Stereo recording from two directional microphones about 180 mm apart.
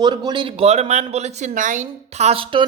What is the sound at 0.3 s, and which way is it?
Speech, 30° right (ahead or behind).